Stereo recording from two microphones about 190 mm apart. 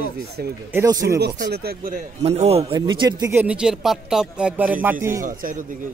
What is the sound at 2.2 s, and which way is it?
A man's voice, 35° right (ahead or behind).